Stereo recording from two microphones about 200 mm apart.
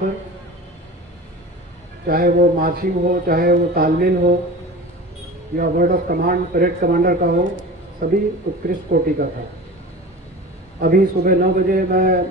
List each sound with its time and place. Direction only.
2.0 s speech: 50° right (ahead or behind)
5.6 s speech: 45° right (ahead or behind)
10.8 s speech: 45° right (ahead or behind)